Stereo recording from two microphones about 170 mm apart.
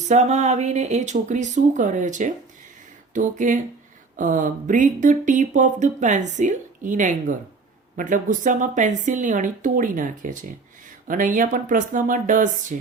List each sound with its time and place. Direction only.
0.1 s speech: 40° right (ahead or behind)